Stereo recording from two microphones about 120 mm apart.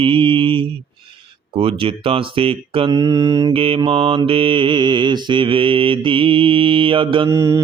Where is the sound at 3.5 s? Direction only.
50° right (ahead or behind).